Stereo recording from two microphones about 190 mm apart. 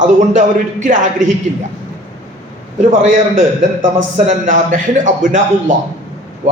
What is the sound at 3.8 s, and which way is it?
A man's voice, 40° right (ahead or behind).